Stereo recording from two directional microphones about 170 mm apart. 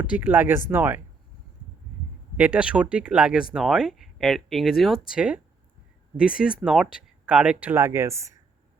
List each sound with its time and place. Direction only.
0.0 s speech: 10° right (ahead or behind)
2.3 s speech: 10° right (ahead or behind)